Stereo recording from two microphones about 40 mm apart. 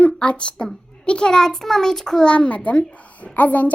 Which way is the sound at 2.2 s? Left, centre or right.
Left.